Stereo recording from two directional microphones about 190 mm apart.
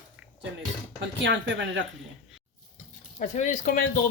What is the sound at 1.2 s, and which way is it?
Speech, 70° right (ahead or behind).